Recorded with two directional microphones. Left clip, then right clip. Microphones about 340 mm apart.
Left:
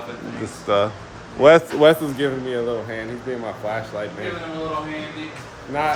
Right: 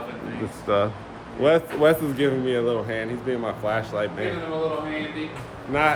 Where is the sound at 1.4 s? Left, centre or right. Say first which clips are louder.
Left 6 dB; left.